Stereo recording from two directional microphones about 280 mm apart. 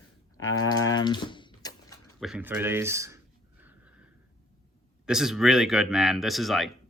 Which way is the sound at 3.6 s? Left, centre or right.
Centre.